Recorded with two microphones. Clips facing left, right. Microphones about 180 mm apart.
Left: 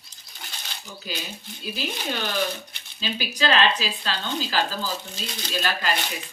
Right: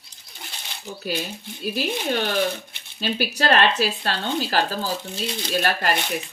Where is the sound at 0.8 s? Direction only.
65° right (ahead or behind).